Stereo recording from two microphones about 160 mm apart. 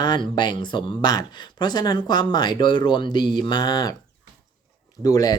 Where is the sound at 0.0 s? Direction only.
25° left (ahead or behind).